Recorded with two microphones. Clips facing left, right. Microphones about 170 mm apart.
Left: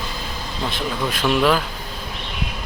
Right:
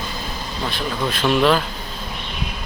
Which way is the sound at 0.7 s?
15° left (ahead or behind).